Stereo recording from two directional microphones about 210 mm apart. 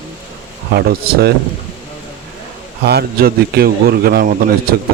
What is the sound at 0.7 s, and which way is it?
Speech, 45° right (ahead or behind).